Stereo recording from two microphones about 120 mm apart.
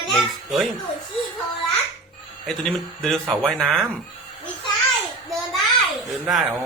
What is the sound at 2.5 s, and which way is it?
Speech, 5° left (ahead or behind).